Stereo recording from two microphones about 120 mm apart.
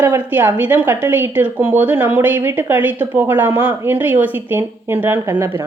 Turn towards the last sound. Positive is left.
turn(degrees=-25)  # may be behind; listen again after turning